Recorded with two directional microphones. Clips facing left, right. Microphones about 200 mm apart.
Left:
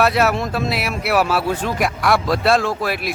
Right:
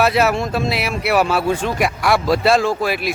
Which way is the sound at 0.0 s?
Centre (ahead or behind).